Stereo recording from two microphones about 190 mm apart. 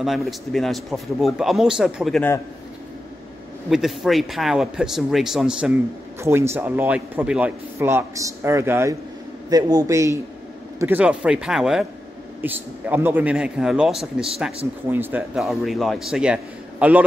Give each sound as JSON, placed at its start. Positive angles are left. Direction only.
{"t": 0.0, "sound": "speech", "side_deg": 0}
{"t": 3.7, "sound": "a man's voice", "side_deg": 0}